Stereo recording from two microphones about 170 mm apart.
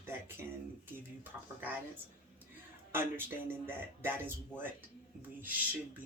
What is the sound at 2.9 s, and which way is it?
Speech, 15° right (ahead or behind).